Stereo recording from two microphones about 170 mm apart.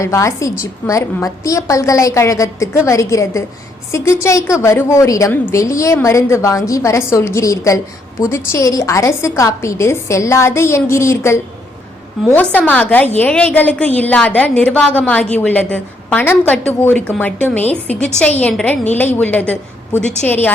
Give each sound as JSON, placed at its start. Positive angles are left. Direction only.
{"t": 0.0, "sound": "a woman's voice", "side_deg": 20}